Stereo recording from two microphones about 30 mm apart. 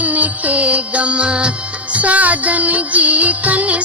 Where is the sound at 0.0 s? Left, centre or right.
Right.